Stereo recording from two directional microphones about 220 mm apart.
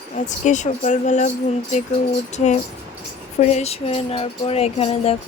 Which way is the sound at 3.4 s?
30° left (ahead or behind).